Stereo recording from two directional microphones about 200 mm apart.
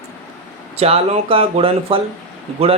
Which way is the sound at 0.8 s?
30° right (ahead or behind).